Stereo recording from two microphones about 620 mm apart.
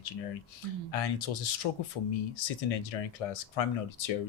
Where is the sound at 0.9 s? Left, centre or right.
Left.